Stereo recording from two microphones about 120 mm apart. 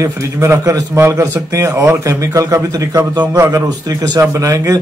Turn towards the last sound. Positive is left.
turn(degrees=-25)  # may be behind; listen again after turning